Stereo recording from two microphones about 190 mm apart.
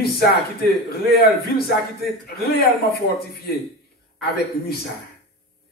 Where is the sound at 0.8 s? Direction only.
55° left (ahead or behind).